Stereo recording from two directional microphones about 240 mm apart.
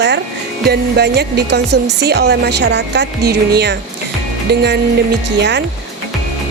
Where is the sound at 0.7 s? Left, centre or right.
Right.